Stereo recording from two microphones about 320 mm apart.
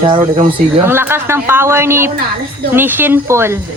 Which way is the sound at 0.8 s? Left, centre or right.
Centre.